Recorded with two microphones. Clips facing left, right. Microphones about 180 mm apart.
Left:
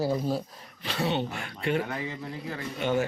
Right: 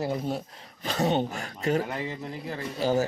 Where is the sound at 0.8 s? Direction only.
45° right (ahead or behind).